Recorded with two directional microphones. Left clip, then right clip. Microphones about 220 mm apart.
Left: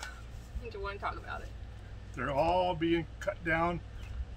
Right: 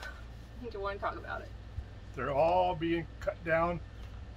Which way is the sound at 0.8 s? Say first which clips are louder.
Right 2 dB; 5° right (ahead or behind).